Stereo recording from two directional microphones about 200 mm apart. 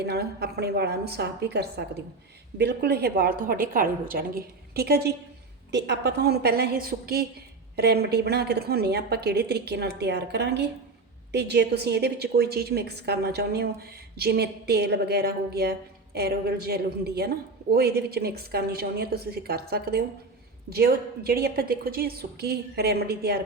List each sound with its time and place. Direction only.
0.0 s a woman's voice: 55° right (ahead or behind)